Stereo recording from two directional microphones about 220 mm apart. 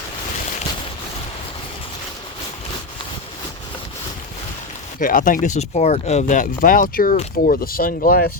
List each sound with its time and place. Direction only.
4.9 s speech: 40° left (ahead or behind)